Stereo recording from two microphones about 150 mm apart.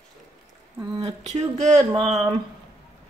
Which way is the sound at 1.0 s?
50° right (ahead or behind).